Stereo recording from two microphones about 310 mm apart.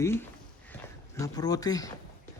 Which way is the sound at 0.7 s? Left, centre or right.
Centre.